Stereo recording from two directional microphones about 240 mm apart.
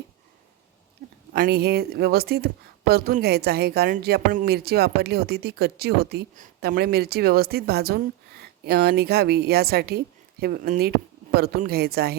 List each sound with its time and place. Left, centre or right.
1.3 s speech: right